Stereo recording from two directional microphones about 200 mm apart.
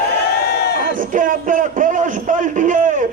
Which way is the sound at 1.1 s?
40° right (ahead or behind).